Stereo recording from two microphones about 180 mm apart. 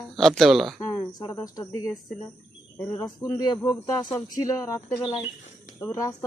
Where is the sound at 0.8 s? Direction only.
15° left (ahead or behind).